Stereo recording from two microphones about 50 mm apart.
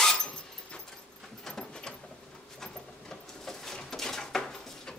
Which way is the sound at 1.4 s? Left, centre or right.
Centre.